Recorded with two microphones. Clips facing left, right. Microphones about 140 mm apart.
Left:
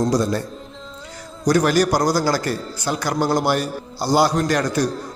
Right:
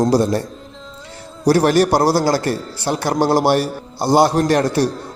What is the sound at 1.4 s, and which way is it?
A man's voice, 30° right (ahead or behind).